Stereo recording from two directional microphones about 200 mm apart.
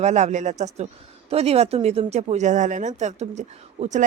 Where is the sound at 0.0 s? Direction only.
35° right (ahead or behind).